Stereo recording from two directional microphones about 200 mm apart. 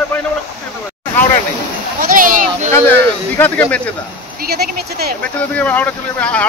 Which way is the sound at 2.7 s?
10° left (ahead or behind).